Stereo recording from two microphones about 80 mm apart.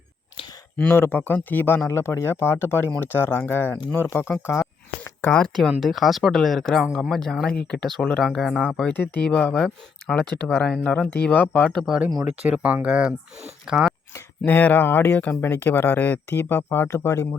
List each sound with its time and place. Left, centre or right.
0.8 s speech: left
5.8 s speech: centre
8.9 s speech: left
9.2 s speech: centre
11.6 s speech: centre
11.9 s speech: centre
14.4 s speech: left